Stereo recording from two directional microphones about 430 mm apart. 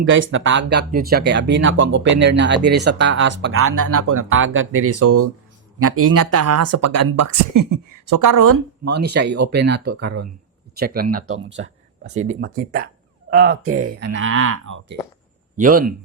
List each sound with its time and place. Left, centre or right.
0.0 s speech: right
8.9 s speech: right
12.3 s speech: right